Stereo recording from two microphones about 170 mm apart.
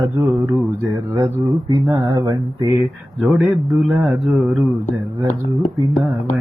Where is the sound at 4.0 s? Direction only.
Centre (ahead or behind).